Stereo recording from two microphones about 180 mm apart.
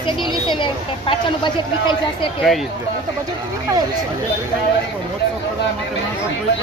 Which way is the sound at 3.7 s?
15° right (ahead or behind).